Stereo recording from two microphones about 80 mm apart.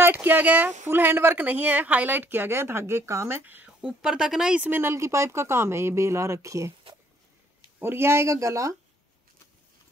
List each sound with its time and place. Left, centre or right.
0.0 s speech: right
3.8 s speech: centre
4.6 s speech: right
7.8 s speech: right